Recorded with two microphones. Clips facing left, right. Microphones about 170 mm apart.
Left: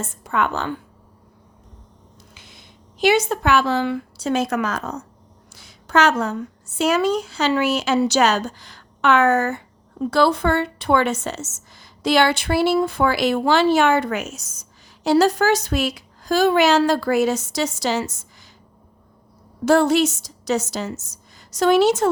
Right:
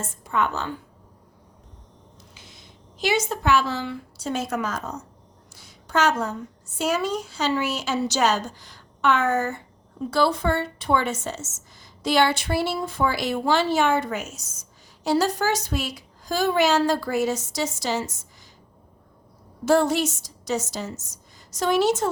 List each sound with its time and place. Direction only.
0.3 s a woman's voice: 70° left (ahead or behind)
2.3 s a woman's voice: 60° left (ahead or behind)
19.6 s a woman's voice: 75° left (ahead or behind)